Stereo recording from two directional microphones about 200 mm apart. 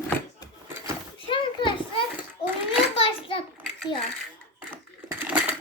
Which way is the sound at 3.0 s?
25° left (ahead or behind).